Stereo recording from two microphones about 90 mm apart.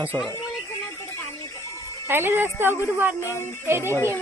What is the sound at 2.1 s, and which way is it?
Speech, 25° right (ahead or behind).